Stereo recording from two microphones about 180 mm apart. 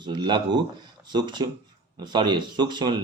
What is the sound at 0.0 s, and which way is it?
Speech, 25° right (ahead or behind).